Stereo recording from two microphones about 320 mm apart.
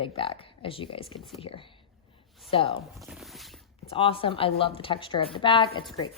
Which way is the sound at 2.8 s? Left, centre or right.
Centre.